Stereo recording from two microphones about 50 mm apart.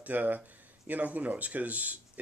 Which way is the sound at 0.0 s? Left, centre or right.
Right.